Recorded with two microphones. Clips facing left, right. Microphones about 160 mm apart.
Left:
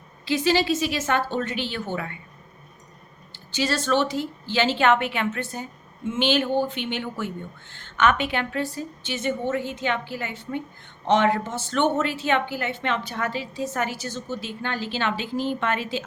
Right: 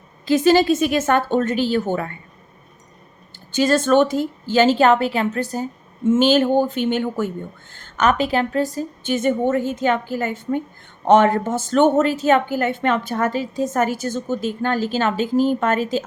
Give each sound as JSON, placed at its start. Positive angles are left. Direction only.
{"t": 0.3, "sound": "a woman's voice", "side_deg": -45}
{"t": 3.3, "sound": "a woman's voice", "side_deg": -45}